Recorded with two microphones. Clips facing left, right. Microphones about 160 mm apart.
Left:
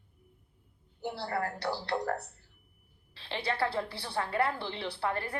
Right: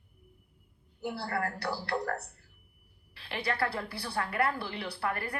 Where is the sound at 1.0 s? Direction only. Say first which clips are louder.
Even; 25° left (ahead or behind).